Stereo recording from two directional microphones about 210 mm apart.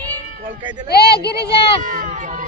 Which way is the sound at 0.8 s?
50° left (ahead or behind).